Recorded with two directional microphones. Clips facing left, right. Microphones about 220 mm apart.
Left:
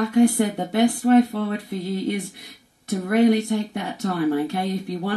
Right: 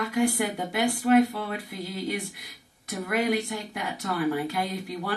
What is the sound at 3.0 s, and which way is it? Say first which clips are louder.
Speech: left 9 dB; 30° left (ahead or behind).